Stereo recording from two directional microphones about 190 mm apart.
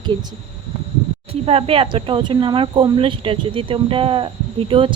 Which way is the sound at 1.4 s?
30° right (ahead or behind).